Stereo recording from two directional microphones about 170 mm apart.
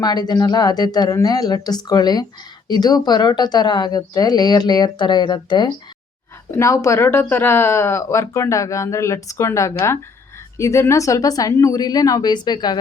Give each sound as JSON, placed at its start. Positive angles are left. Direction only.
{"t": 0.0, "sound": "a woman's voice", "side_deg": 25}
{"t": 6.6, "sound": "a woman's voice", "side_deg": 15}